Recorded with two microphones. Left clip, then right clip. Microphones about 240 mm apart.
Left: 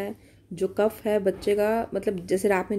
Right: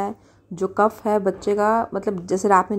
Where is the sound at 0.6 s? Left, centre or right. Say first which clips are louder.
Right 5 dB; centre.